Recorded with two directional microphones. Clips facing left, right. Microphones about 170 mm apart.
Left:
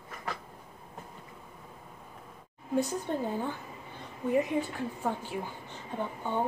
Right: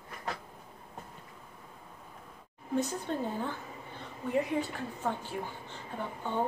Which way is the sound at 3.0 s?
15° left (ahead or behind).